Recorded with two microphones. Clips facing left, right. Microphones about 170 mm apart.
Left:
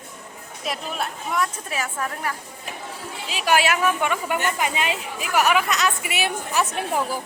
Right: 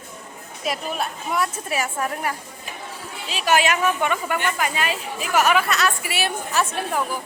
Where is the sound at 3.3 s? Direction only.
10° left (ahead or behind).